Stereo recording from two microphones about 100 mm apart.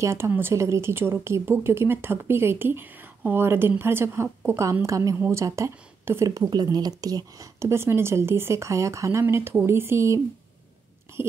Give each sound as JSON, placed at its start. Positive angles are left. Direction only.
{"t": 0.0, "sound": "a woman's voice", "side_deg": -25}